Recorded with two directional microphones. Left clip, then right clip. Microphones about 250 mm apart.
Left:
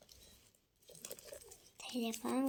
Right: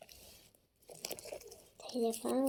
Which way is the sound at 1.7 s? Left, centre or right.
Left.